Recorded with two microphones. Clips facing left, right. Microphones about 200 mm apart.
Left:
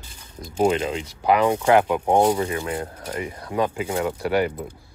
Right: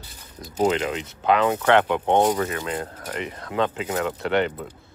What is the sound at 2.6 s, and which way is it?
Speech, 25° left (ahead or behind).